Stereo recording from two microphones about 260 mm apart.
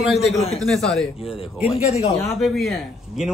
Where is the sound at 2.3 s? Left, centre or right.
Centre.